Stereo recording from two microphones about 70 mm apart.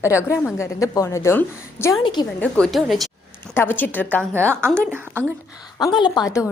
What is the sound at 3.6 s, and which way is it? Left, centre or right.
Speech, left.